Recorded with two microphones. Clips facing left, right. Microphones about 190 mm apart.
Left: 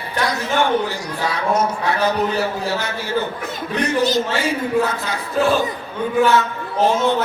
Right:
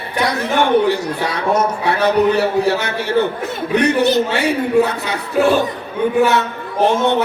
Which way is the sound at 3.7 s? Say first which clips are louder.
Right 4 dB; 65° right (ahead or behind).